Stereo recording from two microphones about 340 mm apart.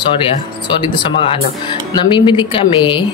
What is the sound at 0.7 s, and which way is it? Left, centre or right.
Speech, centre.